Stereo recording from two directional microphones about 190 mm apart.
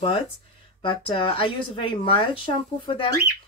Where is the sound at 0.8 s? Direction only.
30° left (ahead or behind).